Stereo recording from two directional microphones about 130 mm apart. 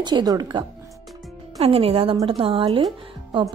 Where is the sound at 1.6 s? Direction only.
45° right (ahead or behind).